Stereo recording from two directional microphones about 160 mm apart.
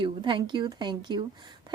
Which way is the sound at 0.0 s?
30° right (ahead or behind).